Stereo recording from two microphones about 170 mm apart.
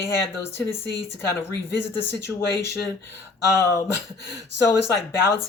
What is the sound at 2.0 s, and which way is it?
Speech, 15° left (ahead or behind).